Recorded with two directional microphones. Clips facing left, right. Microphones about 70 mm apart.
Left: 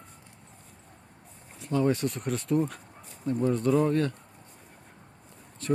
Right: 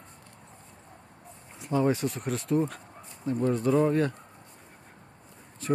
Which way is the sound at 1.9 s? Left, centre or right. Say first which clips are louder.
Even; centre.